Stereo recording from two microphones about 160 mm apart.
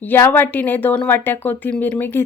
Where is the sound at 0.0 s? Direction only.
10° left (ahead or behind).